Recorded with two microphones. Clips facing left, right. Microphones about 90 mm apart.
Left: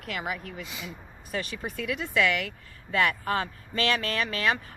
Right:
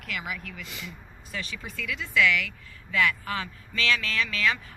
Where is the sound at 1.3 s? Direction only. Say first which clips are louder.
Left 4 dB; 40° left (ahead or behind).